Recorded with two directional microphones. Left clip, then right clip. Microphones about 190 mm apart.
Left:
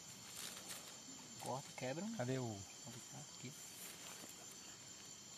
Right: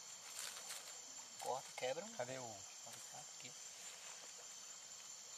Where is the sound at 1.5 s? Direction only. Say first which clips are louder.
Right 2 dB; 60° right (ahead or behind).